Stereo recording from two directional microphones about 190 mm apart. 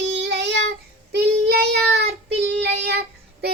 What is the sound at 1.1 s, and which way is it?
Child singing, 60° right (ahead or behind).